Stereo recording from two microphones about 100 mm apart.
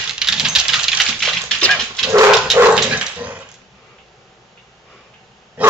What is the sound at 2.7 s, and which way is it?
Dog, 10° right (ahead or behind).